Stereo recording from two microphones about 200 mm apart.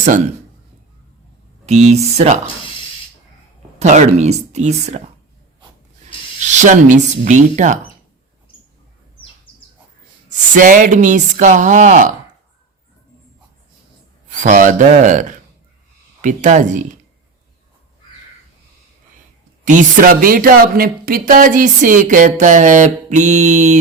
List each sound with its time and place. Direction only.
1.6 s speech: 35° right (ahead or behind)
3.8 s speech: 35° right (ahead or behind)
6.4 s speech: 35° right (ahead or behind)
10.2 s speech: 40° right (ahead or behind)
14.3 s speech: 40° right (ahead or behind)
19.6 s speech: 40° right (ahead or behind)